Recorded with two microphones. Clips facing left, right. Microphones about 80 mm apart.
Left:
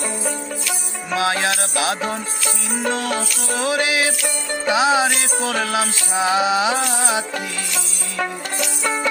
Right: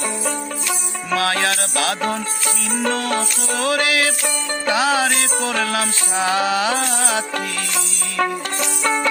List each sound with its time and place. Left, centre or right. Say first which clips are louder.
1.1 s music: even; centre
2.7 s music: right 1 dB; centre